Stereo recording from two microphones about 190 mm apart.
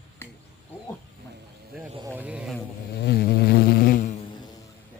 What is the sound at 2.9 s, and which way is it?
Insect, 55° left (ahead or behind).